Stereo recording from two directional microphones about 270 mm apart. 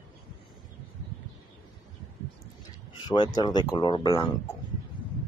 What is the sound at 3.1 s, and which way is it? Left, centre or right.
Speech, centre.